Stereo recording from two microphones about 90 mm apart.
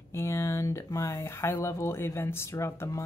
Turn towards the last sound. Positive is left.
turn(degrees=30)  # may be behind; listen again after turning